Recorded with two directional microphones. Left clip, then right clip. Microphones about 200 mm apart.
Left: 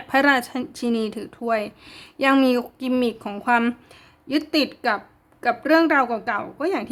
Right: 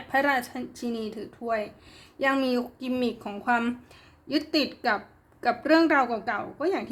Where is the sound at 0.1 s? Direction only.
25° left (ahead or behind).